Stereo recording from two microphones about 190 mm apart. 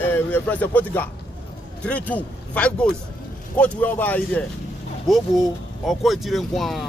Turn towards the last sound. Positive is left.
turn(degrees=0)  # may be behind; listen again after turning